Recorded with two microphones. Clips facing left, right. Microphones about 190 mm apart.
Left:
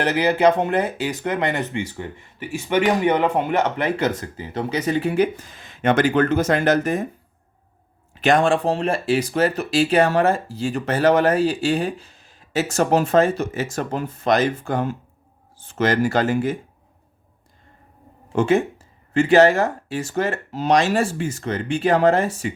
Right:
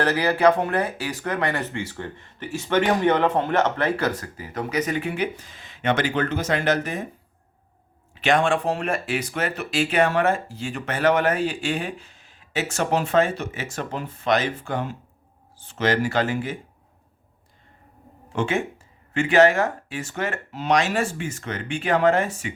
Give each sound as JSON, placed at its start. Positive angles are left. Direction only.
{"t": 0.0, "sound": "speech", "side_deg": 20}
{"t": 8.1, "sound": "speech", "side_deg": 40}
{"t": 18.3, "sound": "speech", "side_deg": 40}